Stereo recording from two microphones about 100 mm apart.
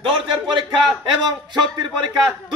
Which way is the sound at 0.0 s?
60° right (ahead or behind).